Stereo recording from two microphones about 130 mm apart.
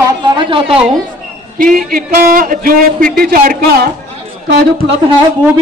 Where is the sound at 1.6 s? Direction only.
90° right.